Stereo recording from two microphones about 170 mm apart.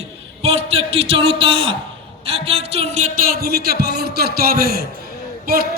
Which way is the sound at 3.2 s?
65° right (ahead or behind).